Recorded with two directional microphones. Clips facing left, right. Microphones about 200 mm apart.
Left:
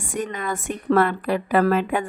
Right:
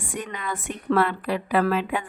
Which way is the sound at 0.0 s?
45° left (ahead or behind).